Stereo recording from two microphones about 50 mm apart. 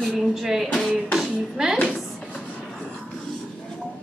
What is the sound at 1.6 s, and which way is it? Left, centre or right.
Speech, centre.